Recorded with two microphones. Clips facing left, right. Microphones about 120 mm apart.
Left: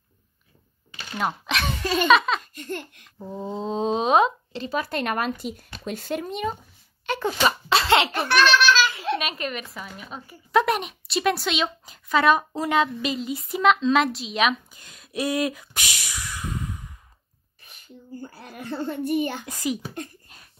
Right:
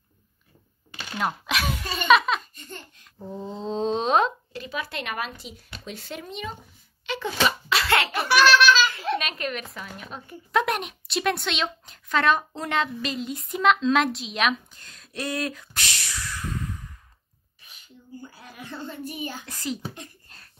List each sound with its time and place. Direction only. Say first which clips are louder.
1.1 s speech: left 1 dB; centre (ahead or behind)
2.5 s laughter: left 10 dB; 65° left (ahead or behind)
3.6 s speech: left 1 dB; 5° left (ahead or behind)
4.5 s speech: left 5 dB; 30° left (ahead or behind)
4.7 s speech: left 6 dB; 45° left (ahead or behind)
7.7 s a sound: left 6 dB; 25° left (ahead or behind)
8.1 s speech: right 1 dB; 5° right (ahead or behind)
14.8 s speech: left 5 dB; 10° left (ahead or behind)
17.6 s a child's voice: left 5 dB; 55° left (ahead or behind)
19.4 s a child's voice: left 4 dB; 15° left (ahead or behind)
20.3 s a sound: left 1 dB; 10° left (ahead or behind)